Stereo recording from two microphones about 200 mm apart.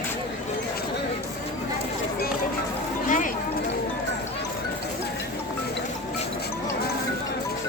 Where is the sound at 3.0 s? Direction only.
40° left (ahead or behind).